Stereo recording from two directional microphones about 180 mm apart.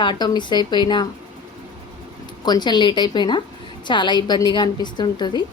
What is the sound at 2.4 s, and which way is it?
A woman's voice, 25° left (ahead or behind).